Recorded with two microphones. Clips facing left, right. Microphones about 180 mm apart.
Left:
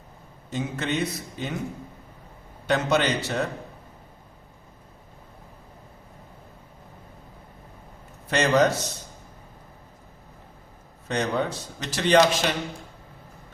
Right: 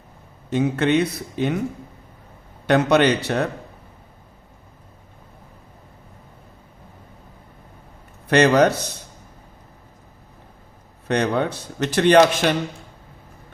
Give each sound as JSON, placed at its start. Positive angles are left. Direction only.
{"t": 0.5, "sound": "speech", "side_deg": -65}
{"t": 2.6, "sound": "speech", "side_deg": -65}
{"t": 8.3, "sound": "speech", "side_deg": -65}
{"t": 11.1, "sound": "speech", "side_deg": -65}